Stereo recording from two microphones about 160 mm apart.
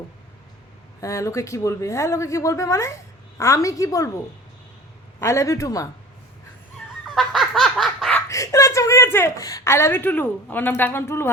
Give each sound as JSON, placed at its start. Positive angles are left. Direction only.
{"t": 1.0, "sound": "a woman's voice", "side_deg": 20}
{"t": 5.2, "sound": "a woman's voice", "side_deg": 20}
{"t": 7.2, "sound": "laughter", "side_deg": 0}
{"t": 8.3, "sound": "a woman's voice", "side_deg": 20}